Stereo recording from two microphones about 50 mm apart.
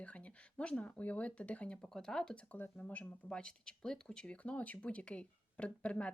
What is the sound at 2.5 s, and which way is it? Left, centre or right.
Speech, left.